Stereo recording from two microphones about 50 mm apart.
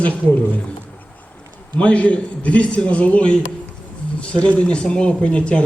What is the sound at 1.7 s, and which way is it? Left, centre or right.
A man's voice, left.